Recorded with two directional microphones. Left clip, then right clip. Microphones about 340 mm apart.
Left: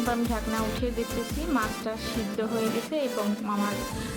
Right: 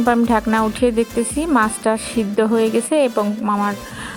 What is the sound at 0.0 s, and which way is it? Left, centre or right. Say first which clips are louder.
Speech: right 12 dB; right.